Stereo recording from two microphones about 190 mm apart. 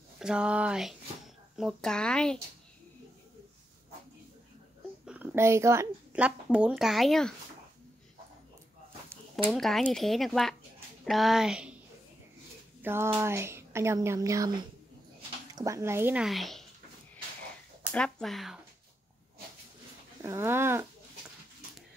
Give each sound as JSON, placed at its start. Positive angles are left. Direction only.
{"t": 0.2, "sound": "speech", "side_deg": -5}
{"t": 5.0, "sound": "speech", "side_deg": -10}
{"t": 9.4, "sound": "speech", "side_deg": 0}
{"t": 12.8, "sound": "speech", "side_deg": -15}
{"t": 17.9, "sound": "speech", "side_deg": 5}
{"t": 20.2, "sound": "speech", "side_deg": -15}